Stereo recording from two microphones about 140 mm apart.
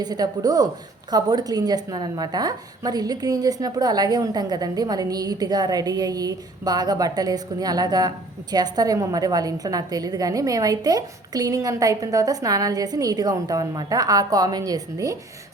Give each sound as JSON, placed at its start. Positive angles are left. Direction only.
{"t": 0.0, "sound": "a woman's voice", "side_deg": -30}